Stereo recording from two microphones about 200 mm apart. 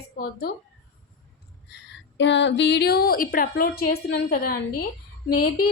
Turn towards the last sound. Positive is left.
turn(degrees=45)  # may be behind; listen again after turning